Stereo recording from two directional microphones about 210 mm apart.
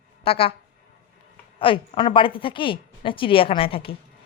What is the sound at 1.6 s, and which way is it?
A woman's voice, 25° left (ahead or behind).